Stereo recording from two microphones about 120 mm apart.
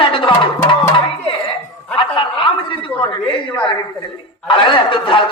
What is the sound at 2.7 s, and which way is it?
Speech, 45° left (ahead or behind).